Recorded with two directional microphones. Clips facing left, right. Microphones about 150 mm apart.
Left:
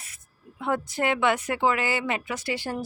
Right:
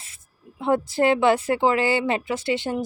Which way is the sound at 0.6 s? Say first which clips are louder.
Right 6 dB; 30° right (ahead or behind).